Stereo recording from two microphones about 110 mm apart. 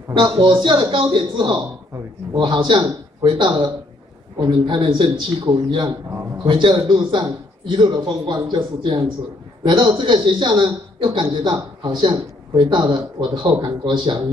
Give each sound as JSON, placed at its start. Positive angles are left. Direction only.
{"t": 0.1, "sound": "speech", "side_deg": -45}